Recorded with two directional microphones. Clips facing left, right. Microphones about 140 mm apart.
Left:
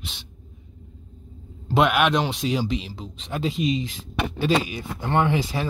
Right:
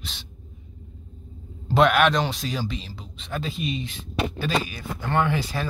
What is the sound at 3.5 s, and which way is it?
Speech, 90° left.